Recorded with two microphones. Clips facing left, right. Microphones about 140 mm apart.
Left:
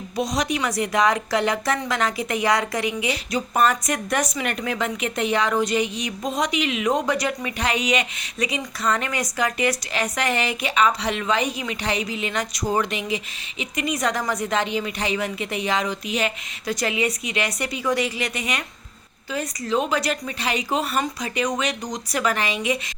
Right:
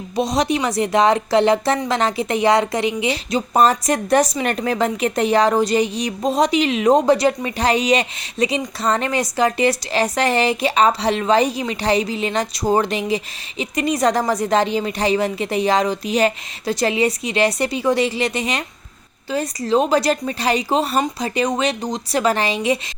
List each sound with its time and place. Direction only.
0.2 s a woman's voice: 30° right (ahead or behind)